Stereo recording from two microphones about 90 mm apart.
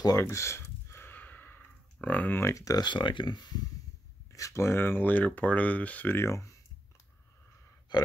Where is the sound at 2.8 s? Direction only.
60° left (ahead or behind).